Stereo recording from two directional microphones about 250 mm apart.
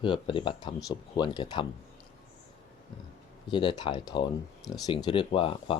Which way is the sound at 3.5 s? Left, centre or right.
Centre.